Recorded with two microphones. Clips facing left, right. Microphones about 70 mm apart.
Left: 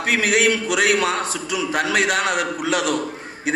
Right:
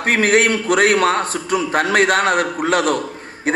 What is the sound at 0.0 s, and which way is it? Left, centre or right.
A man's voice, right.